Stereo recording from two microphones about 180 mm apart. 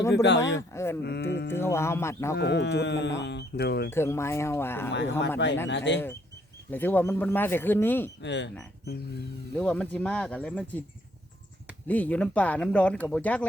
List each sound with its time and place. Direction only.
0.1 s speech: 75° left (ahead or behind)
0.7 s speech: 15° left (ahead or behind)
1.0 s music: 65° left (ahead or behind)
1.5 s speech: 15° left (ahead or behind)
2.4 s speech: 75° left (ahead or behind)
3.8 s speech: 15° left (ahead or behind)
4.9 s speech: 80° left
6.7 s speech: 10° left (ahead or behind)
8.2 s speech: 80° left
9.6 s speech: 5° left (ahead or behind)
11.9 s speech: 10° left (ahead or behind)